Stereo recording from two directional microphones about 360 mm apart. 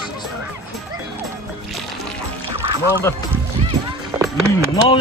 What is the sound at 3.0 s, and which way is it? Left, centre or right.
Speech, centre.